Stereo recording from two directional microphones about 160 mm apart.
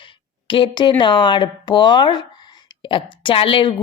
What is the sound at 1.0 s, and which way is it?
Speech, 30° left (ahead or behind).